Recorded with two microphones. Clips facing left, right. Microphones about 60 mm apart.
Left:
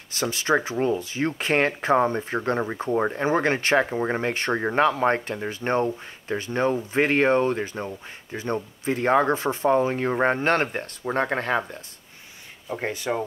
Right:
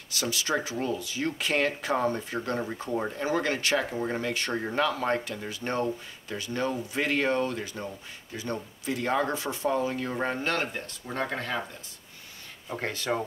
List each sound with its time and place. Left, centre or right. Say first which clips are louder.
0.1 s speech: left 6 dB; left
12.8 s speech: left 4 dB; centre